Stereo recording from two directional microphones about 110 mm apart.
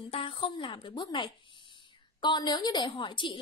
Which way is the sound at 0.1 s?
60° left (ahead or behind).